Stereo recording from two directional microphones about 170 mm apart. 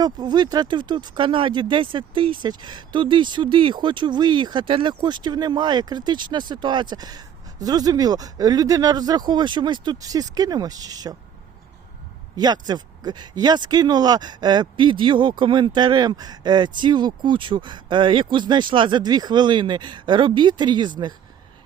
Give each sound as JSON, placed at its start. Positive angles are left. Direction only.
{"t": 0.0, "sound": "speech", "side_deg": -25}
{"t": 12.4, "sound": "speech", "side_deg": -25}